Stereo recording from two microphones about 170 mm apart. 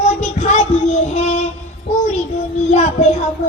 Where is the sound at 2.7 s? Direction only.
45° left (ahead or behind).